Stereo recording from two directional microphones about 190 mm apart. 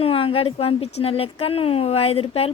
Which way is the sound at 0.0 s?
30° left (ahead or behind).